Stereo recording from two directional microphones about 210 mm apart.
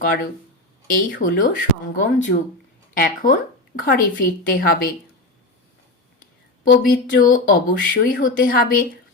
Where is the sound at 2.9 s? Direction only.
40° left (ahead or behind).